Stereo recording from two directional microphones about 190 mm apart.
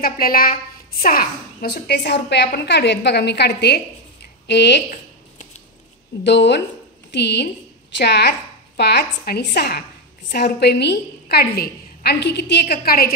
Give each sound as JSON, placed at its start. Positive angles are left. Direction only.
{"t": 0.0, "sound": "a woman's voice", "side_deg": 50}
{"t": 6.2, "sound": "a woman's voice", "side_deg": 65}